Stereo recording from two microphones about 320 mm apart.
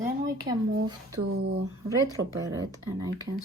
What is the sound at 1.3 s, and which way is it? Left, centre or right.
Speech, right.